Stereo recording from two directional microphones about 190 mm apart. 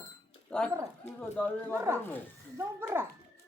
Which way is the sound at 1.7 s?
10° right (ahead or behind).